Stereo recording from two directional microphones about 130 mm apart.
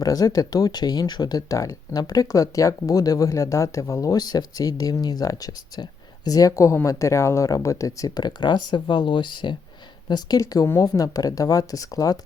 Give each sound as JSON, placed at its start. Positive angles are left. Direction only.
{"t": 0.0, "sound": "speech", "side_deg": 30}